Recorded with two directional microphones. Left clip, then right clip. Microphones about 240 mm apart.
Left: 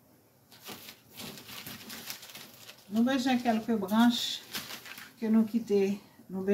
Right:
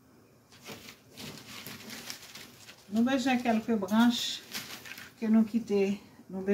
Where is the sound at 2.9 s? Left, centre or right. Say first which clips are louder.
Even; centre.